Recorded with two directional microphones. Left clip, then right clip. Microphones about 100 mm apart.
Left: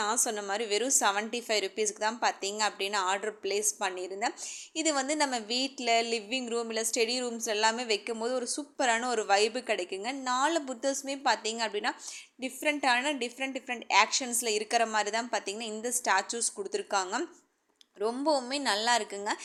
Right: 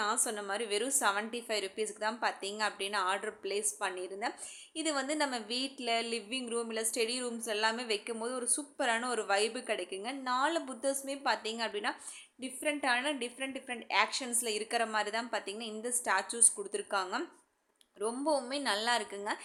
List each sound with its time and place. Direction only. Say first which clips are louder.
0.3 s a woman's voice: left 4 dB; 20° left (ahead or behind)